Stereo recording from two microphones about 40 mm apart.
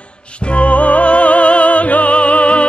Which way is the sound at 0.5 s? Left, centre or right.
Left.